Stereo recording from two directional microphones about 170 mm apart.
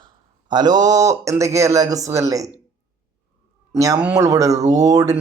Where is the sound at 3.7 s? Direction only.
20° right (ahead or behind).